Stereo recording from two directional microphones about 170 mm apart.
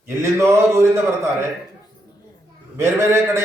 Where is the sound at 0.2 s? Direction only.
15° right (ahead or behind).